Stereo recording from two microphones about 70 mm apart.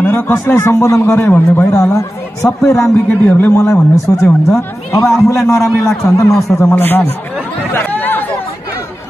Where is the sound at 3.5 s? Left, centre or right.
Left.